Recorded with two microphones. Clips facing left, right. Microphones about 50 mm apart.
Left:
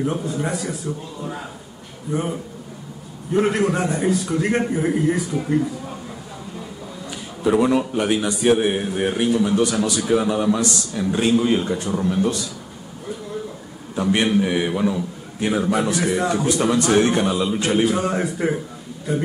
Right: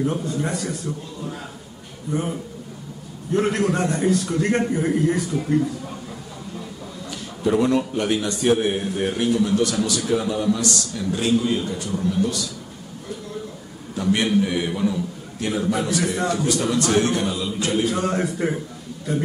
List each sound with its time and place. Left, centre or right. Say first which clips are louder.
0.0 s a man's voice: even; centre
2.0 s a man's voice: left 1 dB; centre
3.3 s a man's voice: left 2 dB; centre
7.1 s a man's voice: left 2 dB; centre
13.9 s a man's voice: left 1 dB; left
16.0 s a man's voice: left 2 dB; centre
16.3 s a man's voice: left 3 dB; centre
17.8 s a man's voice: left 2 dB; centre